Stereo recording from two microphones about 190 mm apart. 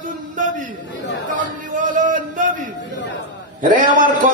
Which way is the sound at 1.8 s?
45° right (ahead or behind).